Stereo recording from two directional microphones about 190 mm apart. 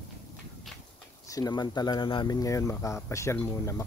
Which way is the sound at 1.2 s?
20° left (ahead or behind).